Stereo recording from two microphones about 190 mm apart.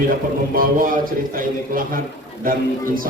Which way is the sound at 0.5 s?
50° right (ahead or behind).